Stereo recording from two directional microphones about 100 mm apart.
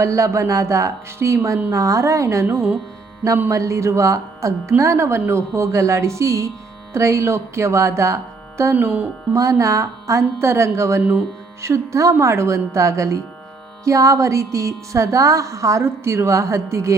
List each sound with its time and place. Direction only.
0.0 s a woman's voice: 30° right (ahead or behind)
9.3 s a woman's voice: 35° right (ahead or behind)